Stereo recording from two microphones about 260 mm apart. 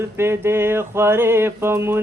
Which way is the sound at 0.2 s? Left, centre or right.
Centre.